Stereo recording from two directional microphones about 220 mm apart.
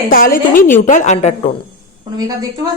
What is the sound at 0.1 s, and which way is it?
A woman's voice, 40° left (ahead or behind).